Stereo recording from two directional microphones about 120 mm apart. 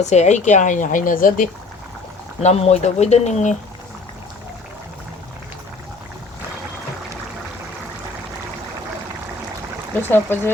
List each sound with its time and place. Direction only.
0.0 s speech: 75° left (ahead or behind); by 1.4 s 90° left
2.4 s speech: 65° left (ahead or behind)
10.0 s speech: 20° left (ahead or behind)